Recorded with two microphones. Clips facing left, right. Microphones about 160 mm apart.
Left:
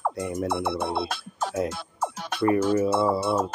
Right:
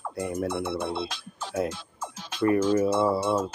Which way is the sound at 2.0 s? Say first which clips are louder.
Left 10 dB; 60° left (ahead or behind).